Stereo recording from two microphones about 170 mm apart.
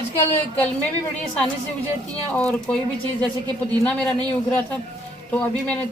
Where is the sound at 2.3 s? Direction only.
10° left (ahead or behind).